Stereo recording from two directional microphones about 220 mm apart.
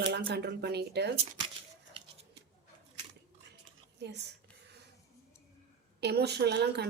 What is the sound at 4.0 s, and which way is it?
Speech, 50° right (ahead or behind).